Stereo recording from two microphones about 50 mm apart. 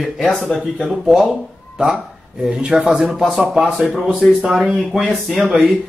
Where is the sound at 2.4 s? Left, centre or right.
Centre.